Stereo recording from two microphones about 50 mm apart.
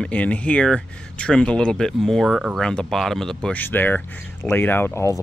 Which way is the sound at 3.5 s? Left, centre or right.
Left.